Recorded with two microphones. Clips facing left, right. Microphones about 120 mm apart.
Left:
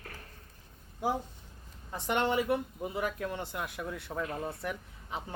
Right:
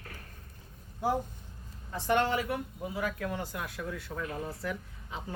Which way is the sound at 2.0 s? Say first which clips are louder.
Even; 20° left (ahead or behind).